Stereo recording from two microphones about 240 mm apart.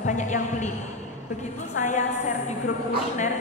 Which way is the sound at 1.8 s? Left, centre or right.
Left.